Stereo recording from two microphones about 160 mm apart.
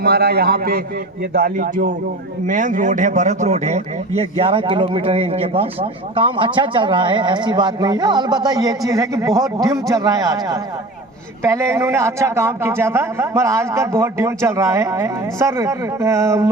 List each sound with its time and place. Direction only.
0.0 s a man's voice: 80° right; by 16.5 s 20° right (ahead or behind)